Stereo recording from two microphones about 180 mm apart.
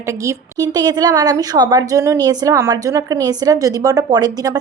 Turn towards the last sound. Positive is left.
turn(degrees=-20)  # may be behind; listen again after turning